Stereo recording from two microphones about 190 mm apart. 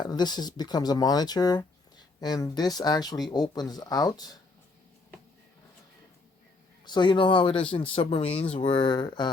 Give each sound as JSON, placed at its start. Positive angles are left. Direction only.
{"t": 0.0, "sound": "speech", "side_deg": 20}
{"t": 6.8, "sound": "speech", "side_deg": 25}